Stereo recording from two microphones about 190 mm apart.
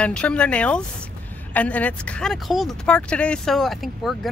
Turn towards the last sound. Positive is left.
turn(degrees=0)  # may be behind; listen again after turning